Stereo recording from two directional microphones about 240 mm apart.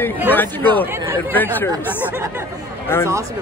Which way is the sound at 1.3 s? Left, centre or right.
Centre.